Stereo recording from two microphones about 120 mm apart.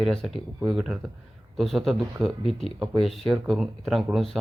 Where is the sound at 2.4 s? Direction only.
50° left (ahead or behind).